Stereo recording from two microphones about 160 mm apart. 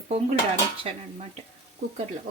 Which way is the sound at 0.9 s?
40° right (ahead or behind).